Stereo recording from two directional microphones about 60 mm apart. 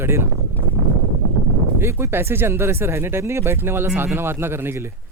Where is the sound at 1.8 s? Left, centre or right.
Right.